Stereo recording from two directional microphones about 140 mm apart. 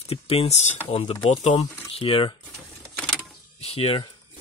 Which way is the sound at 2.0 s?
40° left (ahead or behind).